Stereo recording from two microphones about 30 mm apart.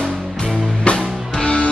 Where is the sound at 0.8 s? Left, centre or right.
Left.